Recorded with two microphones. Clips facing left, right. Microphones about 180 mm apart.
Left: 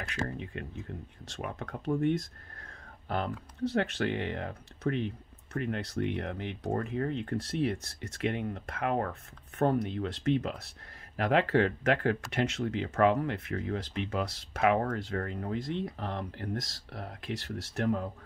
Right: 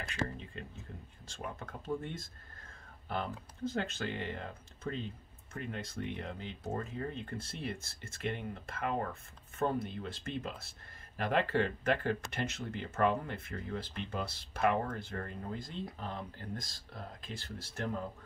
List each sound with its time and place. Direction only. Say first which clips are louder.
0.4 s speech: left 7 dB; 65° left (ahead or behind)